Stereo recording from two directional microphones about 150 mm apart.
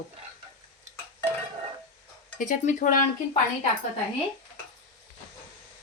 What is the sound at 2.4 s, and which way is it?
Speech, 60° left (ahead or behind).